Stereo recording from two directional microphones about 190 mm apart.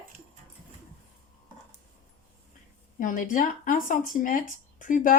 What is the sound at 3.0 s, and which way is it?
Speech, 45° left (ahead or behind).